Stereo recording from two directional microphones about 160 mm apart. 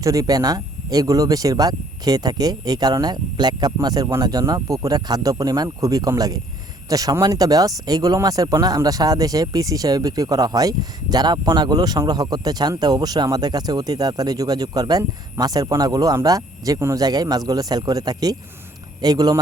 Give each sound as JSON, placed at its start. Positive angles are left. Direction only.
{"t": 0.0, "sound": "speech", "side_deg": -20}